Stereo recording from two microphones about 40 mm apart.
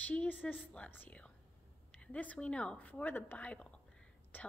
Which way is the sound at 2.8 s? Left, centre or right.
Left.